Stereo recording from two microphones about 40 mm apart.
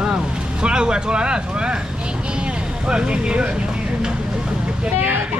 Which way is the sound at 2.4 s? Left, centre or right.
Right.